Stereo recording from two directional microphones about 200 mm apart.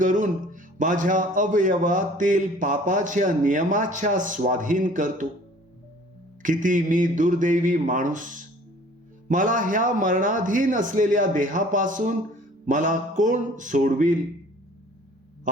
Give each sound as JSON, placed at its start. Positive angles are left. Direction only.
{"t": 0.0, "sound": "a man's voice", "side_deg": -40}
{"t": 6.4, "sound": "a man's voice", "side_deg": -40}